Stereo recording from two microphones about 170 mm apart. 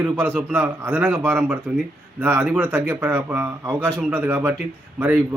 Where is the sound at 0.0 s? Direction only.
10° right (ahead or behind).